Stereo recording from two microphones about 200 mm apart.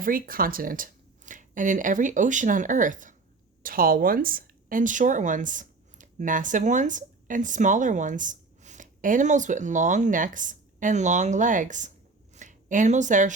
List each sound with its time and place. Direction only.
0.0 s speech: 45° right (ahead or behind)